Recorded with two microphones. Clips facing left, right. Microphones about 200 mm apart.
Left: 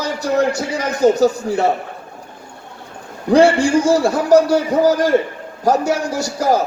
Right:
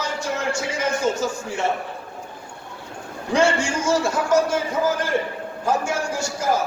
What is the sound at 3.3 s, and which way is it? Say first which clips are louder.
A man's voice: left 9 dB; 35° left (ahead or behind).